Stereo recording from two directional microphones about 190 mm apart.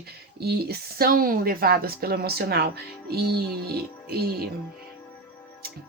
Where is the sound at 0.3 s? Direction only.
55° right (ahead or behind).